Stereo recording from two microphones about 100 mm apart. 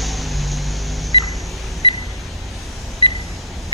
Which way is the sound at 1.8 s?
55° left (ahead or behind).